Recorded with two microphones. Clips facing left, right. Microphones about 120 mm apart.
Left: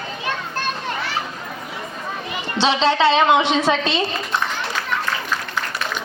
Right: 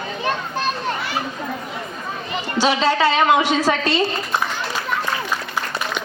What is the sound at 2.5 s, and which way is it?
A woman's voice, 25° left (ahead or behind).